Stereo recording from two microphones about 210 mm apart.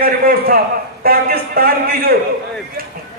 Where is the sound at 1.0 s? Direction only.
45° right (ahead or behind).